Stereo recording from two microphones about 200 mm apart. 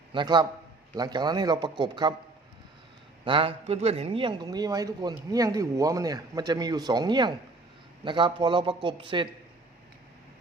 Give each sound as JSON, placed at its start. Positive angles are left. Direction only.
{"t": 0.1, "sound": "a man's voice", "side_deg": -20}
{"t": 3.2, "sound": "a man's voice", "side_deg": -25}